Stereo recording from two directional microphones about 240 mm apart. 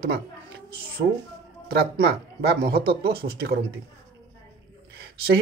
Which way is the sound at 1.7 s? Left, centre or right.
Right.